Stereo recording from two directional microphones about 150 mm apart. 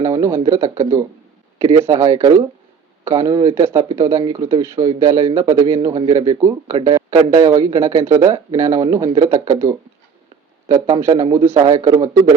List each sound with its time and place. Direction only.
0.0 s speech: 20° right (ahead or behind)